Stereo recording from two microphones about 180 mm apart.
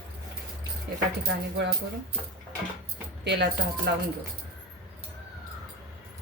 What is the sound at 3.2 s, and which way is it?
Speech, 70° right (ahead or behind).